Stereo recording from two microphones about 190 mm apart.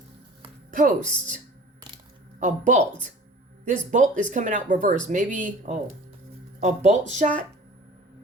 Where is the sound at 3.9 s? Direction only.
40° right (ahead or behind).